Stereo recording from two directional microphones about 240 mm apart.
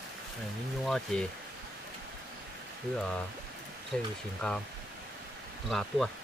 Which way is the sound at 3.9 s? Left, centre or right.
Centre.